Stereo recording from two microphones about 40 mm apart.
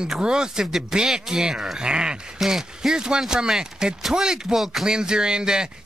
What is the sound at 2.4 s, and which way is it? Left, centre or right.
Speech, centre.